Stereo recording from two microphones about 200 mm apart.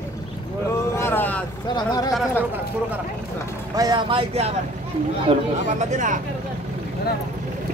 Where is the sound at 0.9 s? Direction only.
10° left (ahead or behind).